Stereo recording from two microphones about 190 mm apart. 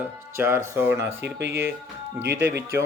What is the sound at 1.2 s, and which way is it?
Speech, 65° right (ahead or behind).